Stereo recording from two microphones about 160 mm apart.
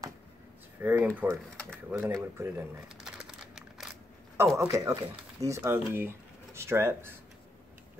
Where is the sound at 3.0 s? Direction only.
5° right (ahead or behind).